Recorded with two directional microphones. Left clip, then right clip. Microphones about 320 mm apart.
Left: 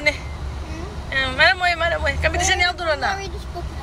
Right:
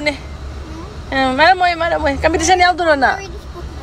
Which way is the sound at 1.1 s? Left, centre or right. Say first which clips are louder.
Right 5 dB; centre.